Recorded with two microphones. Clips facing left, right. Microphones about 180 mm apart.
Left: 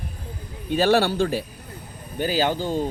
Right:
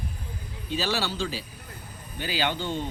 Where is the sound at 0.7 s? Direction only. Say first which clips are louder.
Left 10 dB; 55° left (ahead or behind).